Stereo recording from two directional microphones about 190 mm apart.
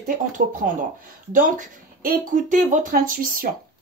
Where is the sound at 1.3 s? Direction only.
45° right (ahead or behind).